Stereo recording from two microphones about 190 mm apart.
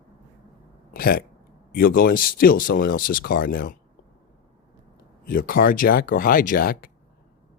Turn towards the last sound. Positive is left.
turn(degrees=50)  # may be behind; listen again after turning